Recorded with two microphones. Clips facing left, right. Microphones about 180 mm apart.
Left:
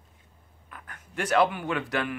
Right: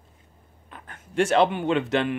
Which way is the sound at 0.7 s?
25° right (ahead or behind).